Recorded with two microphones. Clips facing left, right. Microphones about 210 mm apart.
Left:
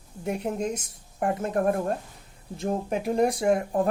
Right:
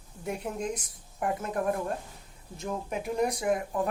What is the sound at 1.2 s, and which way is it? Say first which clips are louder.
A woman's voice: left 5 dB; 45° left (ahead or behind).